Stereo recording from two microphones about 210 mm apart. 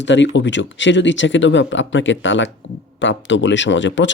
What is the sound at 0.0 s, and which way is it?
Speech, 60° left (ahead or behind).